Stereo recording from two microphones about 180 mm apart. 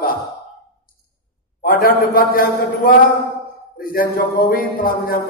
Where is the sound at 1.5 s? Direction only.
50° left (ahead or behind).